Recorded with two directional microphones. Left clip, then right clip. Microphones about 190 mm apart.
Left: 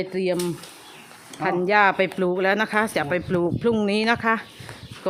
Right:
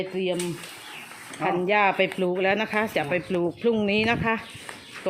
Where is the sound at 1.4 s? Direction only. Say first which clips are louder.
Left 3 dB; 15° left (ahead or behind).